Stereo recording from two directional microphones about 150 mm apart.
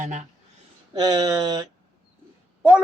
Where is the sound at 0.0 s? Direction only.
55° right (ahead or behind).